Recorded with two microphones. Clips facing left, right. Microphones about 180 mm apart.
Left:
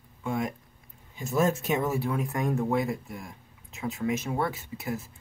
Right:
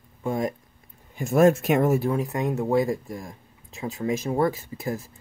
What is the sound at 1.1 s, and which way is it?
Speech, 60° right (ahead or behind).